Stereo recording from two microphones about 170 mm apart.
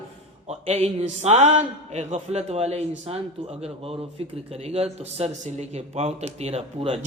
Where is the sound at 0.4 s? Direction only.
40° right (ahead or behind).